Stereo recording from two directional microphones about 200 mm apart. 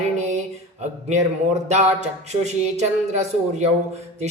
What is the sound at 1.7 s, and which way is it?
Speech, 35° right (ahead or behind).